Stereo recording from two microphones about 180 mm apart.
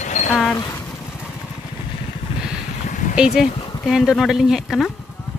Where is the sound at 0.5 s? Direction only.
15° left (ahead or behind).